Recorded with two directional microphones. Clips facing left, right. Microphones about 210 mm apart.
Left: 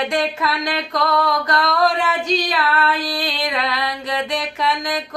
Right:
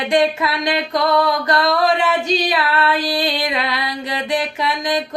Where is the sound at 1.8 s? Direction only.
Centre (ahead or behind).